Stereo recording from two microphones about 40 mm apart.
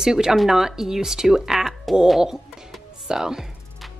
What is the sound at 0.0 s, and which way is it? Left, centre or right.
A woman's voice, centre.